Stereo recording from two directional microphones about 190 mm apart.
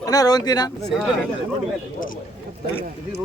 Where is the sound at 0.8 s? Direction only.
Centre (ahead or behind).